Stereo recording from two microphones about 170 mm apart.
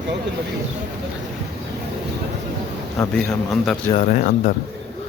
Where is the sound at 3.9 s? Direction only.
45° left (ahead or behind).